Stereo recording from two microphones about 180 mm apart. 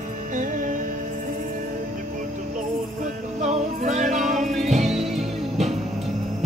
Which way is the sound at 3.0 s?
40° right (ahead or behind).